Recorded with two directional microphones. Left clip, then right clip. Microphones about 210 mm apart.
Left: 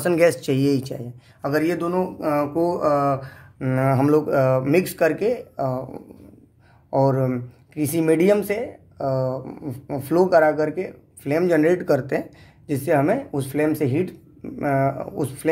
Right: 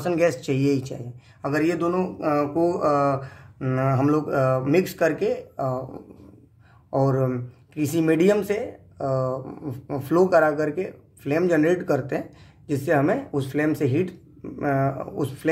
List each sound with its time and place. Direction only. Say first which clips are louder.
0.0 s speech: left 4 dB; 25° left (ahead or behind)